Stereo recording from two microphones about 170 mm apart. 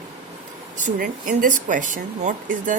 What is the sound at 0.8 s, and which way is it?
Speech, 50° right (ahead or behind).